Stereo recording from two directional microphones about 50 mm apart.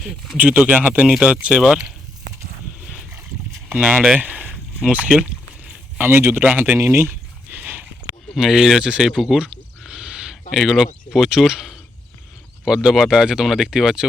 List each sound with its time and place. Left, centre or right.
0.3 s speech: right
2.8 s boat: centre
4.2 s rowboat: right
4.9 s speech: right
6.0 s speech: right
6.4 s speech: right
6.8 s speech: right
7.6 s a sound: right
8.4 s speech: centre
9.4 s a sound: centre
10.5 s speech: centre